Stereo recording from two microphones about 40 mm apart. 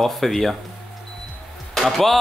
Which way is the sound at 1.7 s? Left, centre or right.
Centre.